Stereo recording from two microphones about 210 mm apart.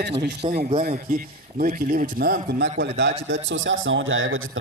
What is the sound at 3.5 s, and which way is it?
Speech, 65° right (ahead or behind).